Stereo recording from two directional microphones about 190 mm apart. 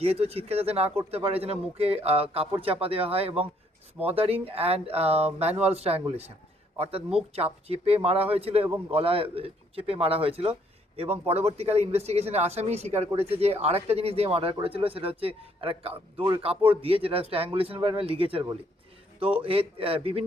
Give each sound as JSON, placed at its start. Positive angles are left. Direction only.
{"t": 0.0, "sound": "a man's voice", "side_deg": -30}